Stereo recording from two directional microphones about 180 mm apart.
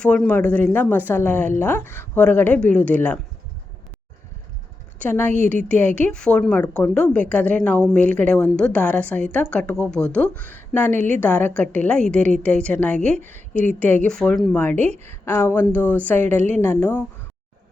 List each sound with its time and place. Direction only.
0.0 s speech: 5° left (ahead or behind)
4.9 s a woman's voice: 10° left (ahead or behind)